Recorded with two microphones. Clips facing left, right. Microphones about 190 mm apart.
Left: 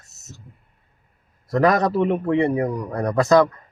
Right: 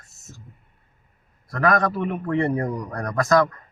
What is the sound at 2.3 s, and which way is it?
Speech, 15° left (ahead or behind).